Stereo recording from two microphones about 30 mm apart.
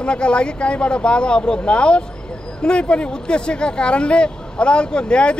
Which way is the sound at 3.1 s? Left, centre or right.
Left.